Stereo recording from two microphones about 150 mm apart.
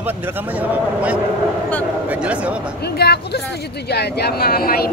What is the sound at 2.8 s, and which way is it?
Speech, 90° left.